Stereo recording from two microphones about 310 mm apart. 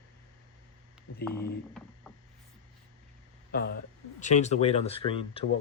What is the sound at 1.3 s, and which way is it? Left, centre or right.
Speech, left.